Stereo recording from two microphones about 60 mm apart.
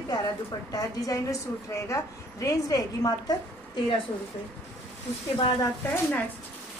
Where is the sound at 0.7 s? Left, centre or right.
Left.